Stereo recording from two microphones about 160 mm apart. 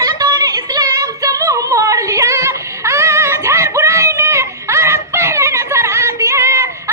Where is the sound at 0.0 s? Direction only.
20° right (ahead or behind).